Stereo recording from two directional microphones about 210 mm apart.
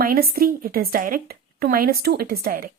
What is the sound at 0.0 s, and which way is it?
A woman's voice, 45° right (ahead or behind).